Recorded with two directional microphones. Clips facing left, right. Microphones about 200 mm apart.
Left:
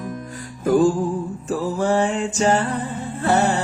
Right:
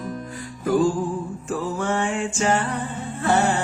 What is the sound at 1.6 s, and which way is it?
Music, 35° left (ahead or behind).